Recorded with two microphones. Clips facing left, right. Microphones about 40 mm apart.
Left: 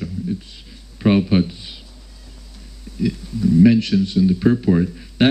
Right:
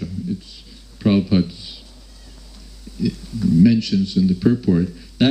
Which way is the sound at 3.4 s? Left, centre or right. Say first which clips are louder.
Left 1 dB; left.